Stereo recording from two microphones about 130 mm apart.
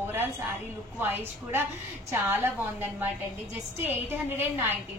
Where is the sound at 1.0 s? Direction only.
15° right (ahead or behind).